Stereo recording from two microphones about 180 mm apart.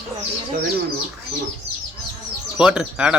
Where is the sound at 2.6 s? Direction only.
5° right (ahead or behind).